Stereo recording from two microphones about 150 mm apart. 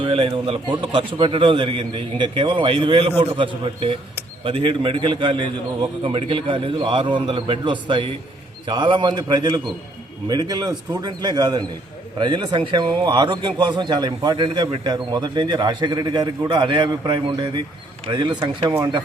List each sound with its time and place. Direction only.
0.0 s a man's voice: 35° right (ahead or behind)